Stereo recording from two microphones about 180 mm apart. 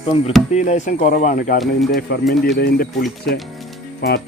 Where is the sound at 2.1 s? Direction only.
60° left (ahead or behind).